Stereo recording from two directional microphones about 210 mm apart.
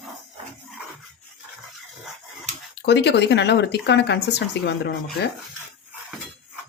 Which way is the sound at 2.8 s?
55° left (ahead or behind).